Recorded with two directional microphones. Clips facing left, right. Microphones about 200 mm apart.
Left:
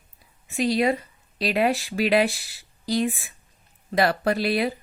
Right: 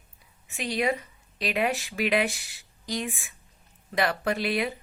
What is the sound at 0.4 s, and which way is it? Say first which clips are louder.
Speech: left 6 dB; 35° left (ahead or behind).